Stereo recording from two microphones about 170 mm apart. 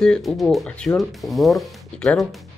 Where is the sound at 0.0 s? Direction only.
Centre (ahead or behind).